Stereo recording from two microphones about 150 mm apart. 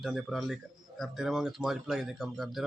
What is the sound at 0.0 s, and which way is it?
Speech, centre (ahead or behind).